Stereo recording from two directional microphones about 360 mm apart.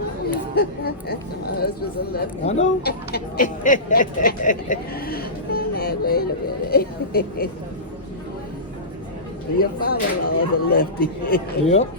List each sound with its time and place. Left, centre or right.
0.5 s speech: left
2.1 s speech: centre
9.8 s speech: left